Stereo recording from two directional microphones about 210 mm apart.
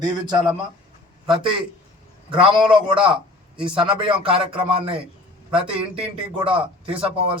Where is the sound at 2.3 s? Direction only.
25° right (ahead or behind).